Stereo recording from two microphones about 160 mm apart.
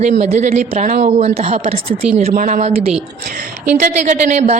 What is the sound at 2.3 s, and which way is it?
Speech, 55° right (ahead or behind).